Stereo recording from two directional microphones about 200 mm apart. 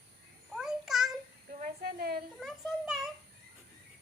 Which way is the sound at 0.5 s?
Centre (ahead or behind).